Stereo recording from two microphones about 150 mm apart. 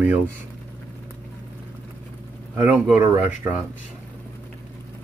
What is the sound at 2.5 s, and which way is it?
Speech, 10° right (ahead or behind).